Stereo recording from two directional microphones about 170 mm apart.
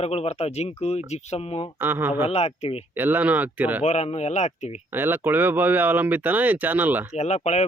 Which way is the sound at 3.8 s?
40° left (ahead or behind).